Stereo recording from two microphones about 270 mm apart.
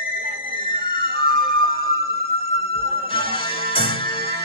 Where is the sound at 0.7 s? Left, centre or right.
Centre.